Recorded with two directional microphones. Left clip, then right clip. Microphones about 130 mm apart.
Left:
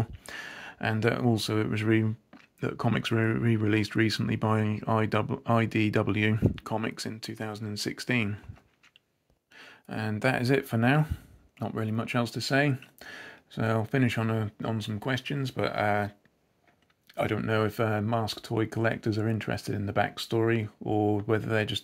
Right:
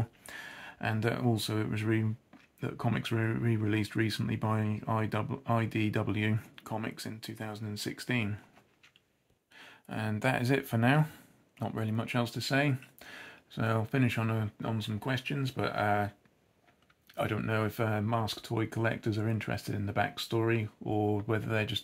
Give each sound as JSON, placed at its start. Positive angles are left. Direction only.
{"t": 0.0, "sound": "a sound", "side_deg": 50}
{"t": 1.2, "sound": "speech", "side_deg": 45}
{"t": 9.5, "sound": "speech", "side_deg": 40}
{"t": 11.0, "sound": "speech", "side_deg": 15}
{"t": 11.5, "sound": "speech", "side_deg": 30}
{"t": 17.1, "sound": "speech", "side_deg": 30}